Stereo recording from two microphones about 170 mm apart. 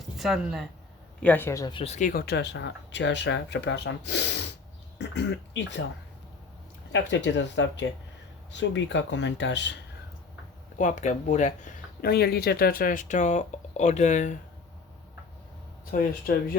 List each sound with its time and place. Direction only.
0.2 s speech: 5° right (ahead or behind)
1.2 s speech: 10° left (ahead or behind)
1.8 s speech: 45° left (ahead or behind); by 5.8 s 90° left
6.9 s speech: 90° left
10.8 s speech: 45° left (ahead or behind)
12.1 s speech: 65° left (ahead or behind); by 14.3 s 45° left (ahead or behind)
15.9 s speech: 60° left (ahead or behind)